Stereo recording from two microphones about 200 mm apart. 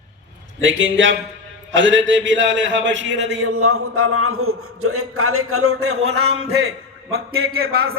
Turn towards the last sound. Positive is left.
turn(degrees=-50)  # may be behind; listen again after turning